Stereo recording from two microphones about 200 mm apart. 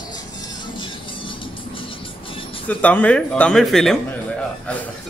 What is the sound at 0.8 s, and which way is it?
Music, 25° left (ahead or behind).